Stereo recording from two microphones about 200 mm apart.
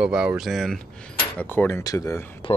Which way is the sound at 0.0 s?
5° right (ahead or behind).